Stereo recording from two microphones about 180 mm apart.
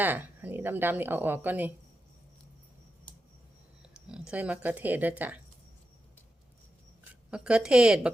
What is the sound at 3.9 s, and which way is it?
Speech, 5° right (ahead or behind).